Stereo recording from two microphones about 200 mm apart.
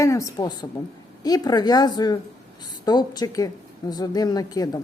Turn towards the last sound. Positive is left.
turn(degrees=20)  # may be behind; listen again after turning